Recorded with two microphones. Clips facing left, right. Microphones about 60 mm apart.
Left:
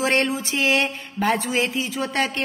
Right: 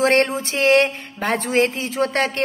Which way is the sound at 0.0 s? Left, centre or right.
Right.